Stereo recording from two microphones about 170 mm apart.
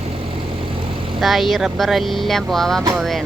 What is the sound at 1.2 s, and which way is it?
Speech, centre (ahead or behind).